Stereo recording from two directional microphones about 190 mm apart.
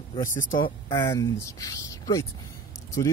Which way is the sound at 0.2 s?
45° left (ahead or behind).